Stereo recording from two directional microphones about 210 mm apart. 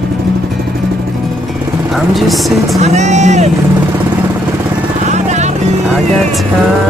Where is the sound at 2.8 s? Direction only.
35° right (ahead or behind).